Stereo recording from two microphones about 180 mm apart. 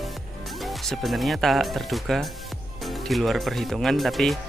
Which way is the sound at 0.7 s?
Centre (ahead or behind).